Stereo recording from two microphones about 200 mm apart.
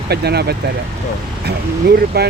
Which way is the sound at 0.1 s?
55° right (ahead or behind).